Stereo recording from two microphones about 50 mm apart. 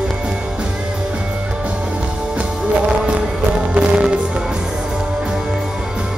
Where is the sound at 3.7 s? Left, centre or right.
Right.